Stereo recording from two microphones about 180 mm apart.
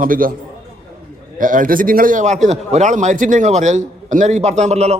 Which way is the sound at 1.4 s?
50° right (ahead or behind).